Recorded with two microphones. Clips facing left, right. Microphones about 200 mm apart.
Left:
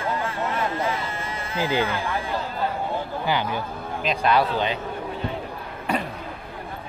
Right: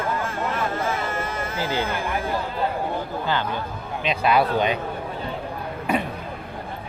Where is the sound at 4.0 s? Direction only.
5° right (ahead or behind).